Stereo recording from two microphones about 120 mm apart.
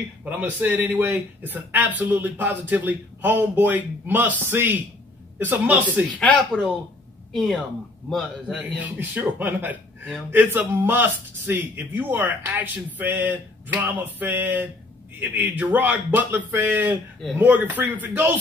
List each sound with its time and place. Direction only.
0.2 s speech: 15° right (ahead or behind)
6.1 s speech: 10° left (ahead or behind)
8.5 s speech: 10° right (ahead or behind)